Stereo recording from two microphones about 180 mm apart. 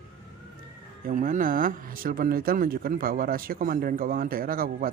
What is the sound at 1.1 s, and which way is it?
Speech, 45° right (ahead or behind).